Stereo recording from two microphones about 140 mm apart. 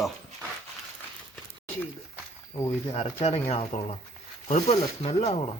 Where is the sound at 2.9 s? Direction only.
40° left (ahead or behind).